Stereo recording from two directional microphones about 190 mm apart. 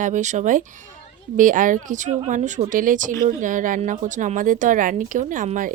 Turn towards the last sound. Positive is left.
turn(degrees=-45)  # may be behind; listen again after turning